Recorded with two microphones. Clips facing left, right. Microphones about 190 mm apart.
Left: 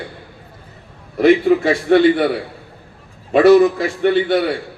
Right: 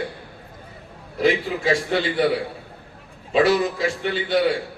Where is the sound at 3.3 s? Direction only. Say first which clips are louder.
Left 9 dB; 60° left (ahead or behind).